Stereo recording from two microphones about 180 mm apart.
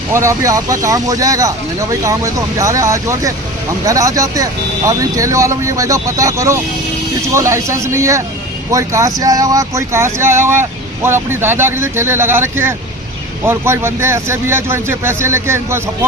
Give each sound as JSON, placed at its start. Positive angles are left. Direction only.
{"t": 0.1, "sound": "speech", "side_deg": -15}